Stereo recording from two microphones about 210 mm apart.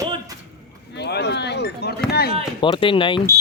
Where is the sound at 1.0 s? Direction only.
55° left (ahead or behind).